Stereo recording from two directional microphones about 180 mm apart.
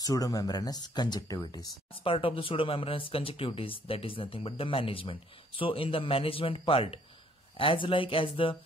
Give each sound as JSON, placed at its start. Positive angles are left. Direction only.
{"t": 0.0, "sound": "speech", "side_deg": 20}